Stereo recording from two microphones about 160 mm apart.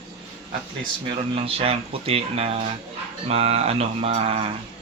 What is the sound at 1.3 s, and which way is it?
A man's voice, 35° right (ahead or behind).